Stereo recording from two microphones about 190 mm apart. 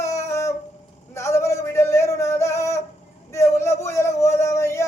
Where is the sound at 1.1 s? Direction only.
15° left (ahead or behind).